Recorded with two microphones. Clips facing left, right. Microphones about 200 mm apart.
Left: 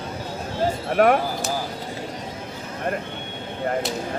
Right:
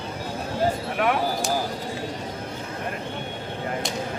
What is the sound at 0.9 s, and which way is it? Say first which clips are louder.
Speech: left 11 dB; 50° left (ahead or behind).